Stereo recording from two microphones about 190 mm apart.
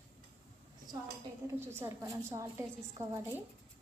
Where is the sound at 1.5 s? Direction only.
15° right (ahead or behind).